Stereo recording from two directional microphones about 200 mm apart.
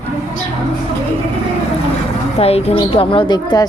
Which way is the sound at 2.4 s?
30° left (ahead or behind).